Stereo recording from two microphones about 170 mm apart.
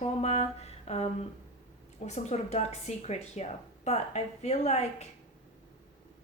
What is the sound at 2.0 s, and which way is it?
A woman's voice, 40° left (ahead or behind).